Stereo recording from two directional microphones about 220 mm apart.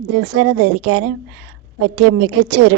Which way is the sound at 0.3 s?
65° right (ahead or behind).